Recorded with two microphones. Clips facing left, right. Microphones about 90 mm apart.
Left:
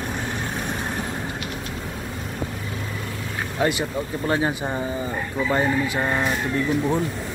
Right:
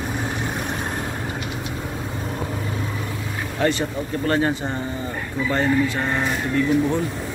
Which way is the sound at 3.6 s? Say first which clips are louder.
Right 1 dB; 10° left (ahead or behind).